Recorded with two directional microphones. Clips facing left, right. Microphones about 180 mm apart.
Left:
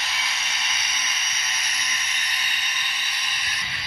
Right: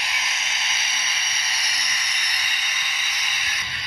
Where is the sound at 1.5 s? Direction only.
35° right (ahead or behind).